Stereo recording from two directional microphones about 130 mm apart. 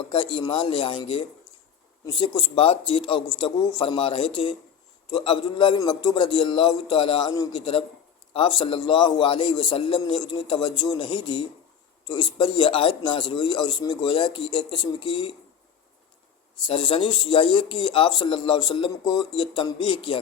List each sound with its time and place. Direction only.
0.1 s speech: 45° left (ahead or behind)
16.6 s speech: 45° left (ahead or behind)